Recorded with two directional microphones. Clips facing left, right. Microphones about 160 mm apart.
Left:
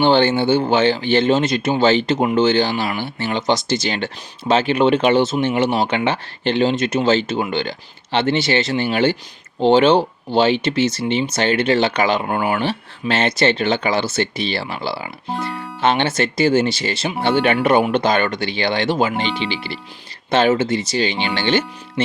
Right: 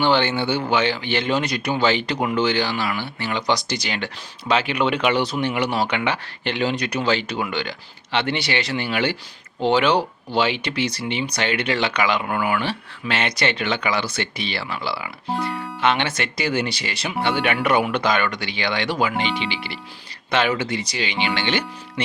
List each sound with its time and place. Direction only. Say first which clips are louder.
0.0 s speech: left 5 dB; 30° left (ahead or behind)
15.3 s music: even; centre (ahead or behind)
15.8 s speech: left 4 dB; 30° left (ahead or behind)
19.2 s speech: left 2 dB; centre (ahead or behind)
20.3 s speech: left 6 dB; 30° left (ahead or behind)